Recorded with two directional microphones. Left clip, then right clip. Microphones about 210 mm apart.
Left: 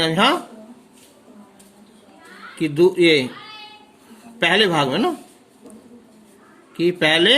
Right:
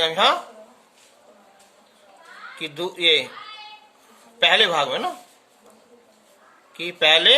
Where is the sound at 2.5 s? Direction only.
20° left (ahead or behind).